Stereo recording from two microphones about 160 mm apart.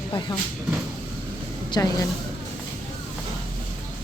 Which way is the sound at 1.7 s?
25° left (ahead or behind).